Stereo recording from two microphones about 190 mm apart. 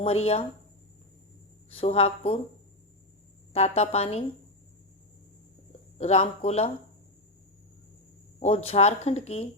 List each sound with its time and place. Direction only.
0.0 s speech: 30° left (ahead or behind)
1.7 s speech: 30° left (ahead or behind)
3.5 s speech: 30° left (ahead or behind)
6.0 s speech: 35° left (ahead or behind)
8.4 s speech: 30° left (ahead or behind)